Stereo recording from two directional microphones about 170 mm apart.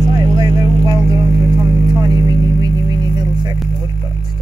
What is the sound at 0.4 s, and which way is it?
Vehicle, 20° right (ahead or behind).